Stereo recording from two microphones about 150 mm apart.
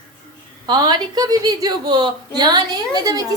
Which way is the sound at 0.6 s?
25° right (ahead or behind).